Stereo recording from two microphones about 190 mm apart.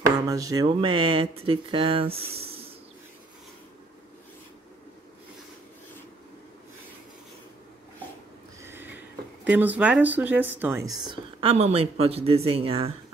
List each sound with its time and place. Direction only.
0.3 s speech: 20° right (ahead or behind)
2.3 s snake: 30° right (ahead or behind)
8.6 s speech: 10° right (ahead or behind)
11.5 s speech: 35° right (ahead or behind)